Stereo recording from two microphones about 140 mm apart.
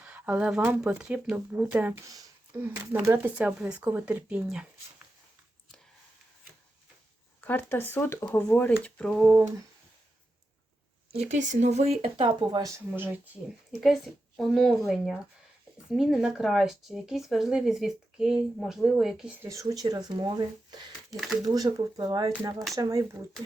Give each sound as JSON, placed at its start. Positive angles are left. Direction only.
{"t": 0.0, "sound": "speech", "side_deg": -10}
{"t": 7.4, "sound": "speech", "side_deg": 15}
{"t": 11.1, "sound": "speech", "side_deg": -55}
{"t": 12.0, "sound": "speech", "side_deg": -40}
{"t": 12.7, "sound": "speech", "side_deg": -15}
{"t": 13.8, "sound": "speech", "side_deg": 0}
{"t": 19.4, "sound": "speech", "side_deg": -20}
{"t": 21.1, "sound": "speech", "side_deg": 0}
{"t": 21.4, "sound": "speech", "side_deg": -25}